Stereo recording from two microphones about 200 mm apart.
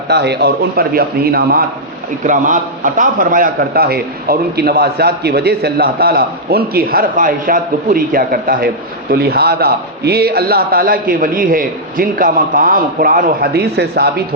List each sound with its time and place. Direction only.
0.1 s a man's voice: 55° right (ahead or behind)
2.2 s a man's voice: 40° right (ahead or behind); by 14.1 s 55° right (ahead or behind)